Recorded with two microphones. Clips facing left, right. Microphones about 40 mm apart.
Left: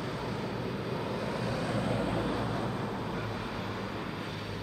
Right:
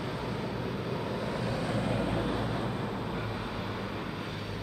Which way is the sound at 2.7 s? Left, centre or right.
Centre.